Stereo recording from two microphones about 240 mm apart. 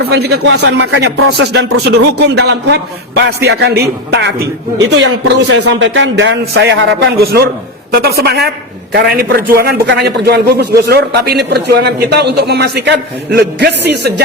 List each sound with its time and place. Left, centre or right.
0.0 s a man's voice: right